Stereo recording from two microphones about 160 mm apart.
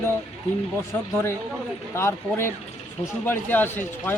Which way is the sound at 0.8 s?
15° left (ahead or behind).